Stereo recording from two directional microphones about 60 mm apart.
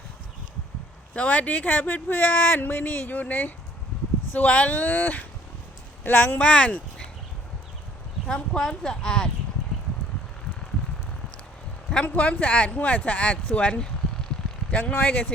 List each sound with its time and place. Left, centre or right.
1.1 s speech: left
6.4 s speech: centre
8.3 s speech: centre
12.0 s speech: left
13.6 s vehicle: centre
14.7 s speech: left